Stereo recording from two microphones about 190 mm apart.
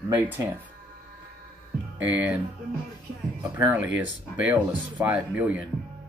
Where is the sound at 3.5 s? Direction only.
10° right (ahead or behind).